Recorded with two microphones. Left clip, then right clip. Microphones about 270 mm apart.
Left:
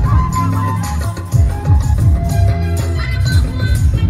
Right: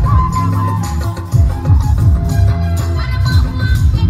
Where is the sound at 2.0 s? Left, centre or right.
Right.